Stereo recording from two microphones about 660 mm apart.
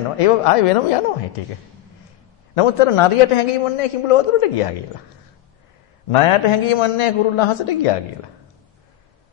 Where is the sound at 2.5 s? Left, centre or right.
Left.